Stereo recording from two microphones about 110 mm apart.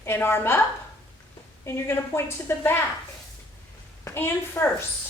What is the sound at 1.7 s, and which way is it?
A woman's voice, 20° left (ahead or behind).